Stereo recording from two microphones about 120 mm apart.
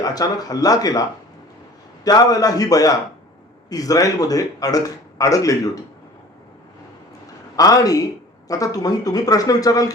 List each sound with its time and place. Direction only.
0.0 s speech: 30° left (ahead or behind)
2.0 s speech: 35° left (ahead or behind)
7.5 s a man's voice: 30° left (ahead or behind)